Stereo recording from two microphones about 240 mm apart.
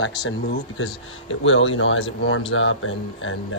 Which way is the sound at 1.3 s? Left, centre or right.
Left.